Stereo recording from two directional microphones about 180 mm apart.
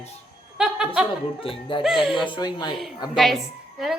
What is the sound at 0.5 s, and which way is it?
Speech, 5° right (ahead or behind).